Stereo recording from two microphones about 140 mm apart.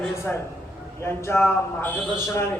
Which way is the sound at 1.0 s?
15° left (ahead or behind).